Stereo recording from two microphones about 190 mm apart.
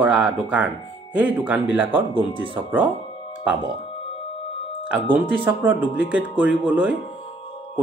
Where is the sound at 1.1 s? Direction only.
10° right (ahead or behind).